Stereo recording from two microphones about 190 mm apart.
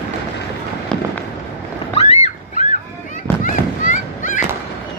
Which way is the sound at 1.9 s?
35° left (ahead or behind).